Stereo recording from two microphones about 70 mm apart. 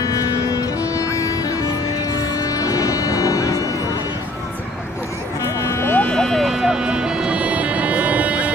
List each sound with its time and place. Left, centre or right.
0.0 s music: left
5.6 s vehicle: left
6.1 s music: centre